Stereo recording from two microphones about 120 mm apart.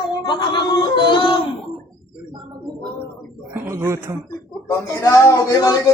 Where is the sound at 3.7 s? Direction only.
20° right (ahead or behind).